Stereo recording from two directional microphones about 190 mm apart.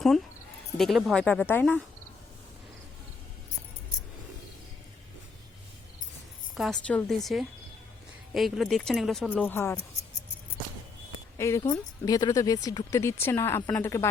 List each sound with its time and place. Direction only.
0.8 s speech: centre (ahead or behind)
6.5 s speech: centre (ahead or behind)
9.5 s a woman's voice: 10° left (ahead or behind)
11.3 s a woman's voice: 15° left (ahead or behind)